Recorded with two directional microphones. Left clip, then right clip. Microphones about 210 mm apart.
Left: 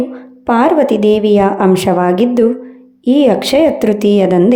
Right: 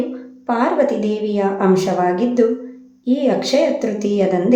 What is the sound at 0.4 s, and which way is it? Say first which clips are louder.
A woman's voice: left 6 dB; 40° left (ahead or behind).